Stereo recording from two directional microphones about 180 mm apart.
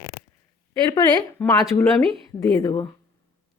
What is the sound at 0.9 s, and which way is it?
A woman's voice, 25° left (ahead or behind).